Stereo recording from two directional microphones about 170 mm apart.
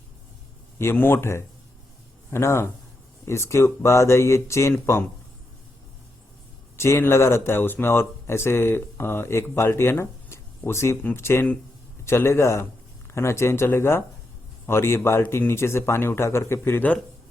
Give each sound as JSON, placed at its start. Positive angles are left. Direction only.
{"t": 0.8, "sound": "speech", "side_deg": 15}
{"t": 6.7, "sound": "speech", "side_deg": 15}